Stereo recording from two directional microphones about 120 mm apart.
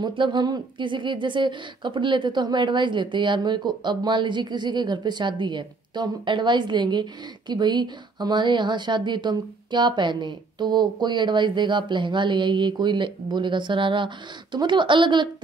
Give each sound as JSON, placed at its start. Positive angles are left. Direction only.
{"t": 0.0, "sound": "speech", "side_deg": -40}